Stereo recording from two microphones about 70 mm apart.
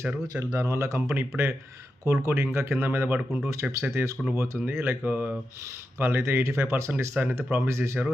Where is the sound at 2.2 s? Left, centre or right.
Right.